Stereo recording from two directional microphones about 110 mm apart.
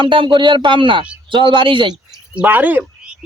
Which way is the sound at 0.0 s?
50° right (ahead or behind).